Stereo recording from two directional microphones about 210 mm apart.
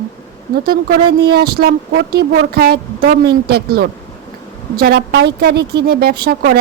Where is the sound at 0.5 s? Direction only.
45° right (ahead or behind).